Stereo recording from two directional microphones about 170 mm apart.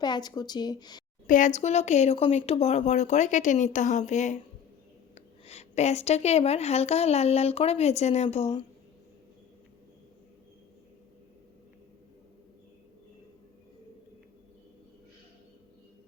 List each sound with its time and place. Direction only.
0.0 s speech: 25° left (ahead or behind)
1.3 s a woman's voice: 45° left (ahead or behind)